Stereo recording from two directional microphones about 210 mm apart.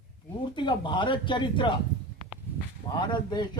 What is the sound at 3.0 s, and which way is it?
Speech, 20° left (ahead or behind).